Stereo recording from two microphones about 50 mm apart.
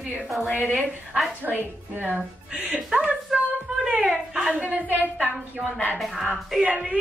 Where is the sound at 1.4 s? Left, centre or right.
Right.